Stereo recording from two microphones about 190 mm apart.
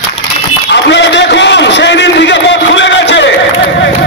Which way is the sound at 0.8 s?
70° left (ahead or behind).